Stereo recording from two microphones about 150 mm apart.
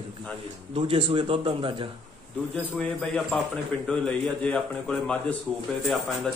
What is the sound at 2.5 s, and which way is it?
A man's voice, 5° left (ahead or behind).